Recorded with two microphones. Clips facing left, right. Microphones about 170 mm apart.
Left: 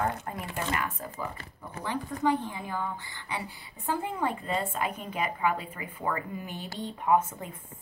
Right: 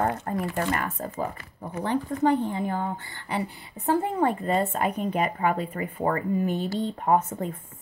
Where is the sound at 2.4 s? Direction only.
55° right (ahead or behind).